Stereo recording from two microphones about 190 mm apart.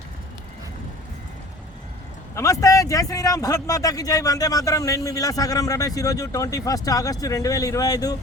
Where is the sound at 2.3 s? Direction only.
15° left (ahead or behind).